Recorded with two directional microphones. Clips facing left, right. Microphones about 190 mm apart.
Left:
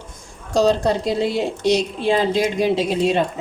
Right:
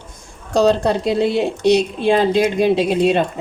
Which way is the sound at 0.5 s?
60° right (ahead or behind).